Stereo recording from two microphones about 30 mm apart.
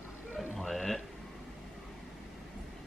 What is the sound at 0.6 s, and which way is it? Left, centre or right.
Music, centre.